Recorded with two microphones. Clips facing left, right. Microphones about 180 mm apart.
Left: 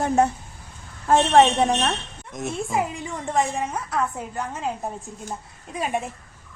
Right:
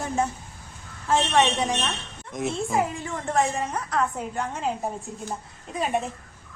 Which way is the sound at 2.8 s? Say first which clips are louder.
Even; 15° left (ahead or behind).